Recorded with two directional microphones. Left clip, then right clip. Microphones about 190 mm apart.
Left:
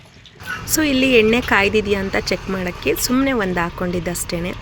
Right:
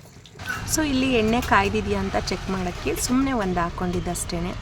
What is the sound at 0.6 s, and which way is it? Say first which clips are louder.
Speech: left 7 dB; 10° left (ahead or behind).